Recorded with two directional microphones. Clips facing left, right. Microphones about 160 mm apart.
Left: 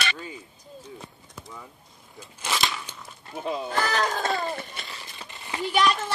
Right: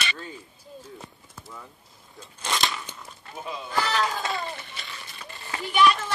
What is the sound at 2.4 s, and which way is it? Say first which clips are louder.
Biting: even; centre (ahead or behind).